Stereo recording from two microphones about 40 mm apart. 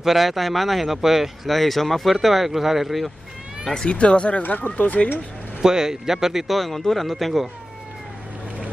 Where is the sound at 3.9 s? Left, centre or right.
Left.